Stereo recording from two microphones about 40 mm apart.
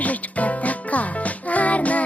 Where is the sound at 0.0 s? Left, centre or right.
Left.